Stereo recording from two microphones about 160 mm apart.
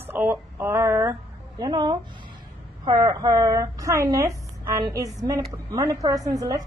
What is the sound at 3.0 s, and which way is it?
Speech, 20° right (ahead or behind).